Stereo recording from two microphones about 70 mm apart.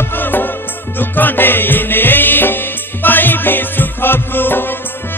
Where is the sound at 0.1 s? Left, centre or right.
Left.